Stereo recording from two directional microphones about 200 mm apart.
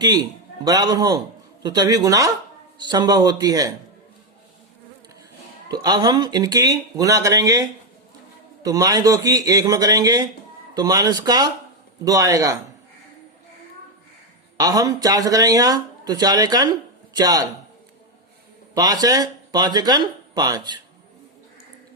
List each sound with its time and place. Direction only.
0.0 s a man's voice: 20° right (ahead or behind)
5.7 s speech: 20° right (ahead or behind)
14.6 s speech: 20° right (ahead or behind)
18.7 s speech: 20° right (ahead or behind)